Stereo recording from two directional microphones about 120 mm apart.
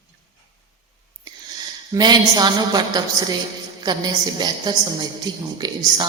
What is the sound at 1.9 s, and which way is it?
A woman's voice, 35° right (ahead or behind).